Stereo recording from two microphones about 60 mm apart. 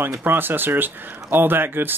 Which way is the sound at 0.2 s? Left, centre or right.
Right.